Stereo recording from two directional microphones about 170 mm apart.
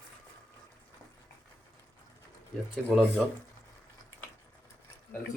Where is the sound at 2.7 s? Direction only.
Centre (ahead or behind).